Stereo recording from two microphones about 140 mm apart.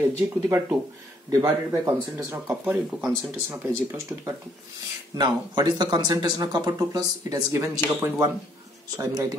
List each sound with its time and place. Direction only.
0.0 s speech: 15° right (ahead or behind)
2.4 s speech: 5° right (ahead or behind)
3.3 s speech: 15° right (ahead or behind)
5.1 s speech: 30° right (ahead or behind)
8.9 s speech: 25° right (ahead or behind)